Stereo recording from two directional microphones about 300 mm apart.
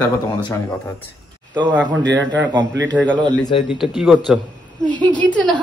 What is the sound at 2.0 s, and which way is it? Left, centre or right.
Speech, right.